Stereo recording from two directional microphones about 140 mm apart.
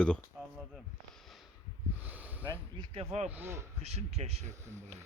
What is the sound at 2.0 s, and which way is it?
Snort, 10° right (ahead or behind).